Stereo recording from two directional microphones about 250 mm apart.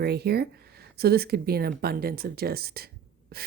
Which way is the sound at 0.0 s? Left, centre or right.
Right.